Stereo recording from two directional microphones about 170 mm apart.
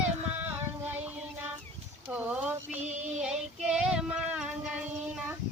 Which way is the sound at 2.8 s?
40° right (ahead or behind).